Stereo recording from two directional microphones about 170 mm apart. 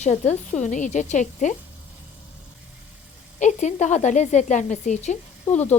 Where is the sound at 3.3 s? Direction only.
45° left (ahead or behind).